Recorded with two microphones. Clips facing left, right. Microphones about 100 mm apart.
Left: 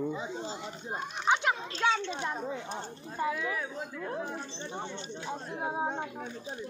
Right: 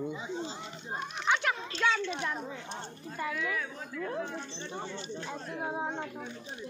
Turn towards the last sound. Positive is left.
turn(degrees=20)  # may be behind; listen again after turning